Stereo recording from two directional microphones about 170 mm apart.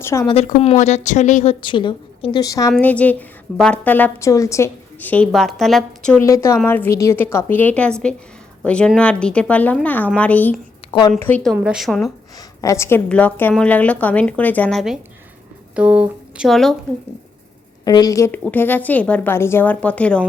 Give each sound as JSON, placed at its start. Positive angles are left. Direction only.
{"t": 0.0, "sound": "a woman's voice", "side_deg": 15}
{"t": 0.6, "sound": "a woman's voice", "side_deg": 40}
{"t": 1.6, "sound": "a woman's voice", "side_deg": 30}
{"t": 2.8, "sound": "a woman's voice", "side_deg": 10}
{"t": 6.2, "sound": "a woman's voice", "side_deg": 15}
{"t": 11.5, "sound": "a woman's voice", "side_deg": -5}
{"t": 12.4, "sound": "a woman's voice", "side_deg": 15}
{"t": 17.8, "sound": "a woman's voice", "side_deg": 20}